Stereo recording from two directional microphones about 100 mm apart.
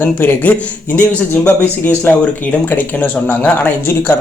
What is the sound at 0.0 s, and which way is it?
A man's voice, 20° left (ahead or behind).